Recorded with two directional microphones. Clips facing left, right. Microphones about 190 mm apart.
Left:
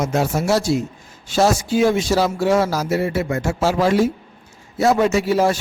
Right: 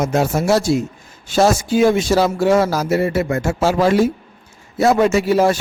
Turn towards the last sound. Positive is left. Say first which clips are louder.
# right 2 dB
turn(degrees=-55)  # may be behind; listen again after turning